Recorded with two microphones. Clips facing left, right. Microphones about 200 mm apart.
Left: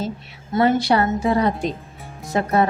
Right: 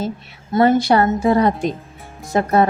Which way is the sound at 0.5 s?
45° right (ahead or behind).